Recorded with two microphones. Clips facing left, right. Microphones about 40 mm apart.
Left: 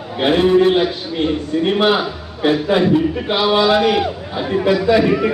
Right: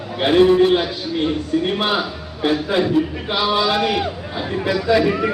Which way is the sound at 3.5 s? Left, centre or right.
Left.